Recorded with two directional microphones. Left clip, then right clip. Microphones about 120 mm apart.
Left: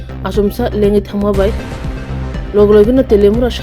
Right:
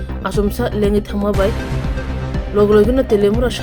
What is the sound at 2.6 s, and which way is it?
Speech, 30° left (ahead or behind).